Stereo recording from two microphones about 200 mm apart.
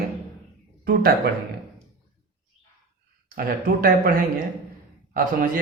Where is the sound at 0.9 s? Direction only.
50° right (ahead or behind).